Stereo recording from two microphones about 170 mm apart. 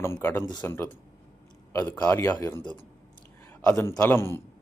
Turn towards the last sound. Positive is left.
turn(degrees=15)  # may be behind; listen again after turning